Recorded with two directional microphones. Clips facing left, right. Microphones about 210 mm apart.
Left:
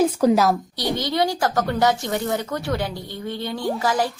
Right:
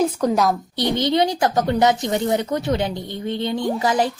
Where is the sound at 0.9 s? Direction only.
20° right (ahead or behind).